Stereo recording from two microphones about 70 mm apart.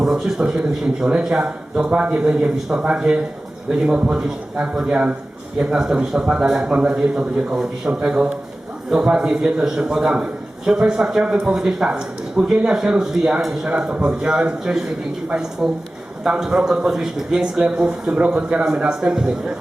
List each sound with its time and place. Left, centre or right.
0.0 s a man's voice: centre